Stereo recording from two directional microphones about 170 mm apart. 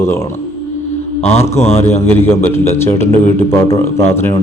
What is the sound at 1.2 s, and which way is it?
Speech, 15° left (ahead or behind).